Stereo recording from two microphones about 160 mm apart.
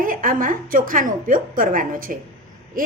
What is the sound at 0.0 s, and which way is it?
A woman's voice, 60° right (ahead or behind).